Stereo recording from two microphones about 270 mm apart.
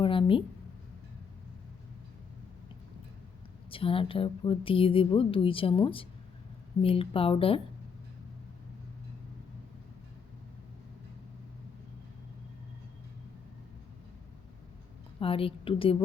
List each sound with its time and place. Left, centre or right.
0.0 s speech: centre
3.7 s a woman's voice: centre
15.2 s a woman's voice: left